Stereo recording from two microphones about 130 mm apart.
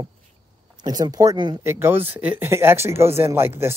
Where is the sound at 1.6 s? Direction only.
20° right (ahead or behind).